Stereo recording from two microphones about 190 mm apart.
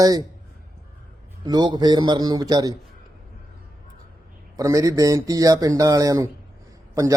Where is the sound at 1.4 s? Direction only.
20° right (ahead or behind).